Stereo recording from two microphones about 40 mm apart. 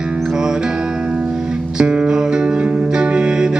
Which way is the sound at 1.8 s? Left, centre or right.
Right.